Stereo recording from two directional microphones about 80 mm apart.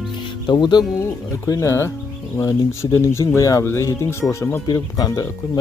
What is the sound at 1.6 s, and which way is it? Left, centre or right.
Speech, left.